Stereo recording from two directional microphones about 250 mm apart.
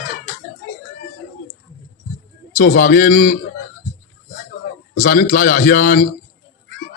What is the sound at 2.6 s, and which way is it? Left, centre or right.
Speech, left.